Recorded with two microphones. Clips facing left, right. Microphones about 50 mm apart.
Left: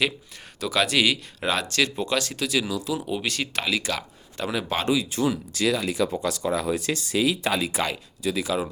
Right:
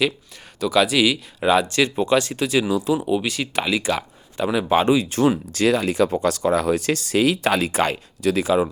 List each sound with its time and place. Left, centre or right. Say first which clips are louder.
0.6 s speech: right 5 dB; centre
1.6 s speech: right 5 dB; centre
3.1 s speech: right 5 dB; centre
5.0 s speech: right 6 dB; right
8.2 s speech: right 6 dB; right